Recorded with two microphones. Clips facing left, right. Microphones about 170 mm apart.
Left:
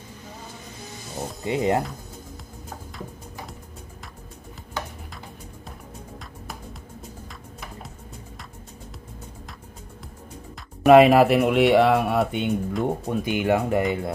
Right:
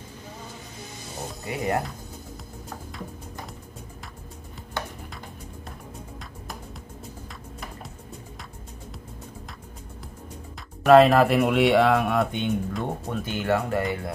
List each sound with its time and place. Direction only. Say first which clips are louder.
1.4 s speech: left 5 dB; 25° left (ahead or behind)
10.9 s speech: left 2 dB; 10° left (ahead or behind)